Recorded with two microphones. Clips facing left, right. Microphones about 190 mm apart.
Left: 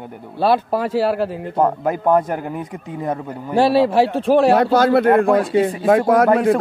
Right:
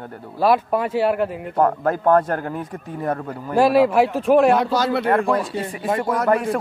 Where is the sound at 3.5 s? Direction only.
30° left (ahead or behind).